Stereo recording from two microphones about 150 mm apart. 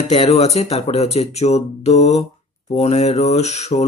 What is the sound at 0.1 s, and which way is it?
Speech, 45° left (ahead or behind).